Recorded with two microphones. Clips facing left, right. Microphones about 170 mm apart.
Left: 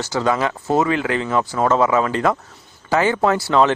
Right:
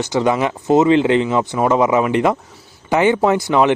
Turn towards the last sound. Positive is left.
turn(degrees=-15)  # may be behind; listen again after turning